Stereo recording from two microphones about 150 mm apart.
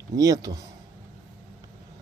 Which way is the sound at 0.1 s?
25° right (ahead or behind).